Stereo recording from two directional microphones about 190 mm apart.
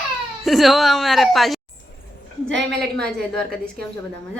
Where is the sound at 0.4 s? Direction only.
Centre (ahead or behind).